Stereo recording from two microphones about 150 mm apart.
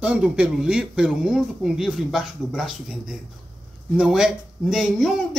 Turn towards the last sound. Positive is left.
turn(degrees=0)  # may be behind; listen again after turning